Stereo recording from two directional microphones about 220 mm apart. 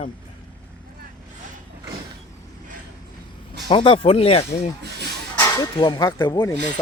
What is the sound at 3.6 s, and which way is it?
Speech, 20° left (ahead or behind).